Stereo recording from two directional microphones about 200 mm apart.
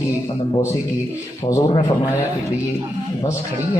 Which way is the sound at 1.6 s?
25° left (ahead or behind).